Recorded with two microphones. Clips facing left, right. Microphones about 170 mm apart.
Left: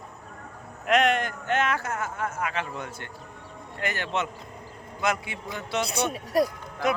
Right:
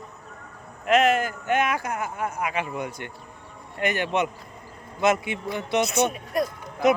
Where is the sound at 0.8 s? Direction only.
Centre (ahead or behind); by 5.9 s 20° right (ahead or behind).